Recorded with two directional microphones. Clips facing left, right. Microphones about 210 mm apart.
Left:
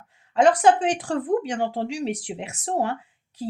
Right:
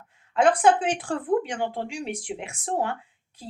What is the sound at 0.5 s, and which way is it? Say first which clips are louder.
Speech: left 2 dB; 40° left (ahead or behind).